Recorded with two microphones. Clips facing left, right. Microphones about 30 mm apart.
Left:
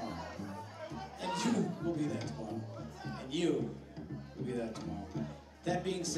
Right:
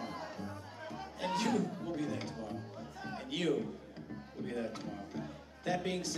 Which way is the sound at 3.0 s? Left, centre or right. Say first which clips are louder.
Left 2 dB; centre.